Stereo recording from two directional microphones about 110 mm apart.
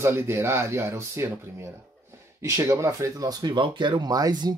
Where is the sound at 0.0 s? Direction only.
25° right (ahead or behind).